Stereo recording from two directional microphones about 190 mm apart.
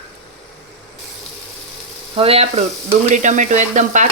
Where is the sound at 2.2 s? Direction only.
30° right (ahead or behind).